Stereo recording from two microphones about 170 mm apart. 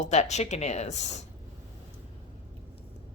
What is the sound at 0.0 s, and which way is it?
Speech, 45° left (ahead or behind).